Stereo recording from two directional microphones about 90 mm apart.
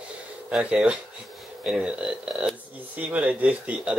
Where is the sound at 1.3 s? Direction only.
Centre (ahead or behind).